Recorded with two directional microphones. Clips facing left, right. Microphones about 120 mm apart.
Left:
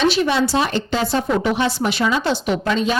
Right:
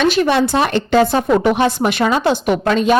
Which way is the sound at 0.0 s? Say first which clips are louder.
Right 3 dB; 55° right (ahead or behind).